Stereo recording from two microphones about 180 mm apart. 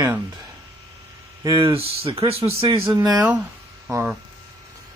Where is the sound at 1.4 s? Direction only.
20° right (ahead or behind).